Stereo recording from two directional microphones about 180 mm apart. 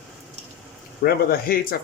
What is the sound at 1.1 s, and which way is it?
Speech, 55° left (ahead or behind).